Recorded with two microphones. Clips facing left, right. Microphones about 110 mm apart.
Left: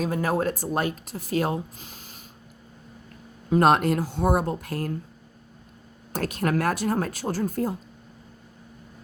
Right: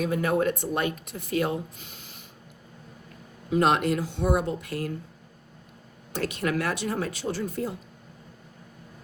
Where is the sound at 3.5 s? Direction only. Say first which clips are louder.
Left 3 dB; 45° left (ahead or behind).